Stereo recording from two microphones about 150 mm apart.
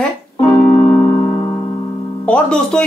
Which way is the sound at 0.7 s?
30° left (ahead or behind).